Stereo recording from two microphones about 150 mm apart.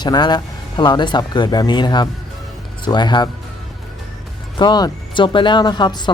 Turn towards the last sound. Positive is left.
turn(degrees=30)  # may be behind; listen again after turning